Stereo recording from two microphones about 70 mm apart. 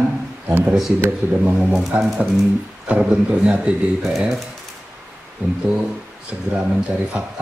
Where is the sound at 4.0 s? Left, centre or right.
Centre.